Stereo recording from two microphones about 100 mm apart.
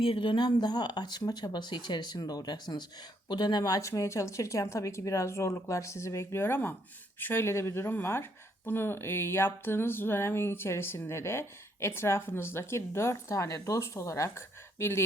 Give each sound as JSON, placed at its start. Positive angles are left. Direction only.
{"t": 0.0, "sound": "speech", "side_deg": 60}